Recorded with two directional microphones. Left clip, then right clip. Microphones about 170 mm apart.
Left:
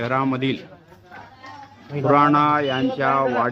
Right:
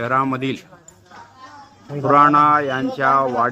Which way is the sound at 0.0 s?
15° right (ahead or behind).